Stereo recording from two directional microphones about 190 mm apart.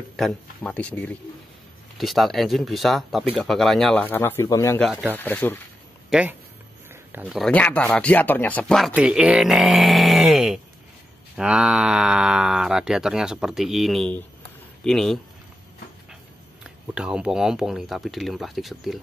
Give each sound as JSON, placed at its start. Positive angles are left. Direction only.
{"t": 0.1, "sound": "speech", "side_deg": 0}
{"t": 6.0, "sound": "speech", "side_deg": -5}
{"t": 6.9, "sound": "a sound", "side_deg": -10}
{"t": 7.2, "sound": "speech", "side_deg": 0}
{"t": 16.6, "sound": "speech", "side_deg": -5}